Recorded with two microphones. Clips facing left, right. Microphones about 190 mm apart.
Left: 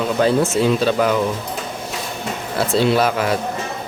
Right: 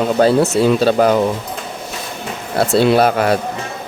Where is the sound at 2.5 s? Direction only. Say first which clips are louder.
Right 4 dB; 60° right (ahead or behind).